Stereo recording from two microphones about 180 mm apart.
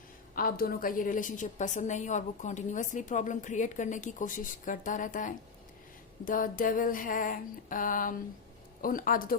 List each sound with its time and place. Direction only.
0.3 s a woman's voice: 55° left (ahead or behind)